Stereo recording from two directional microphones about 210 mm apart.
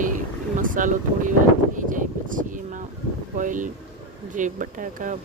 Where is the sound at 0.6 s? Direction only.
40° right (ahead or behind).